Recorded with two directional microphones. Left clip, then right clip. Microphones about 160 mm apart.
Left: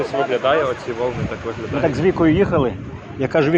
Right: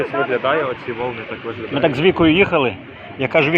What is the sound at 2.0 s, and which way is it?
Speech, 5° left (ahead or behind).